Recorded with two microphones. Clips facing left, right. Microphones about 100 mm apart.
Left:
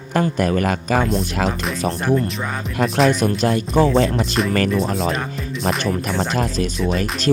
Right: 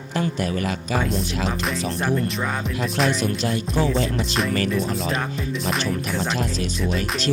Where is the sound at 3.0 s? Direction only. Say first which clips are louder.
Left 5 dB; 45° left (ahead or behind).